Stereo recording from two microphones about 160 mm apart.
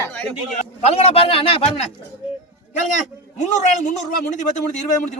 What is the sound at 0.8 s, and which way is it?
A man's voice, 40° left (ahead or behind).